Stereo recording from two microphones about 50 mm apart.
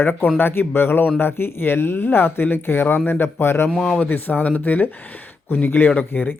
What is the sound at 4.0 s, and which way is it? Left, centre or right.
Speech, left.